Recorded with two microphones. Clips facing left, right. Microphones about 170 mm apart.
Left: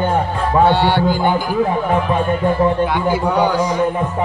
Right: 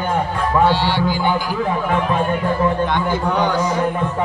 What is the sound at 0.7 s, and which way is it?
Music, 55° left (ahead or behind).